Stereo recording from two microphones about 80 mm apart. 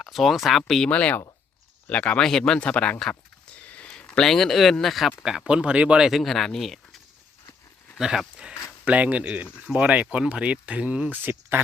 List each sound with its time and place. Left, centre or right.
0.0 s speech: centre
0.9 s speech: centre
3.0 s a sound: centre
4.1 s speech: centre
7.9 s speech: centre
8.8 s speech: centre